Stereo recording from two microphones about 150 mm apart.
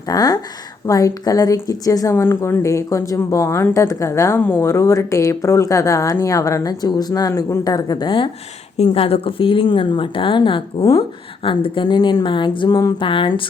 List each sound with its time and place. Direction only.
0.1 s a woman's voice: 25° left (ahead or behind)